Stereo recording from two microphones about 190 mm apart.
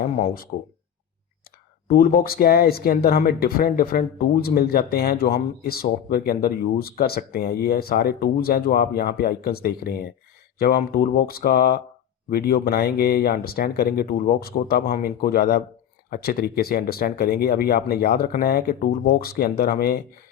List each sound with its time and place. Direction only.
1.9 s speech: 50° left (ahead or behind)